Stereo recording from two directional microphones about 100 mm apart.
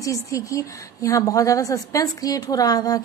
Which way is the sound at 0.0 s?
35° left (ahead or behind).